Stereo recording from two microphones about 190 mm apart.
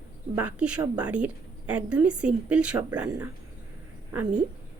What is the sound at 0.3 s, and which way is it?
A woman's voice, 5° right (ahead or behind).